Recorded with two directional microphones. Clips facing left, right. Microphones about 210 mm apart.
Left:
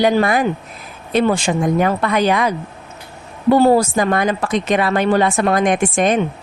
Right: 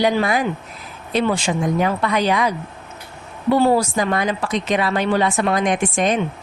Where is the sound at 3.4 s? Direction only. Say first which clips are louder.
Left 4 dB; 40° left (ahead or behind).